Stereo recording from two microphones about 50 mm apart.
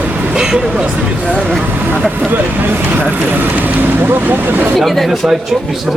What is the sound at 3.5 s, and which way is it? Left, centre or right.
Speech, right.